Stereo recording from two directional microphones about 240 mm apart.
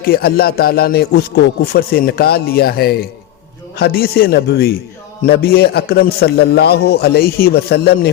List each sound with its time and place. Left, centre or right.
0.0 s a man's voice: left